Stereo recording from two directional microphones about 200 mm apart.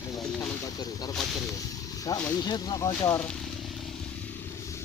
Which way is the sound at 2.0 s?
10° left (ahead or behind).